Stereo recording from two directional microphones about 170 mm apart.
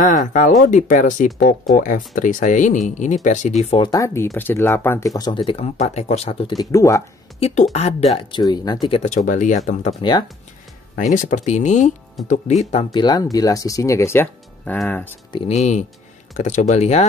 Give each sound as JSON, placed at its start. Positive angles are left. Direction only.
{"t": 0.0, "sound": "speech", "side_deg": 50}
{"t": 3.8, "sound": "speech", "side_deg": 20}
{"t": 6.5, "sound": "speech", "side_deg": 20}
{"t": 7.3, "sound": "speech", "side_deg": 35}
{"t": 9.1, "sound": "speech", "side_deg": 50}
{"t": 10.0, "sound": "speech", "side_deg": 30}
{"t": 11.0, "sound": "speech", "side_deg": 45}
{"t": 12.9, "sound": "speech", "side_deg": 25}
{"t": 15.3, "sound": "speech", "side_deg": 40}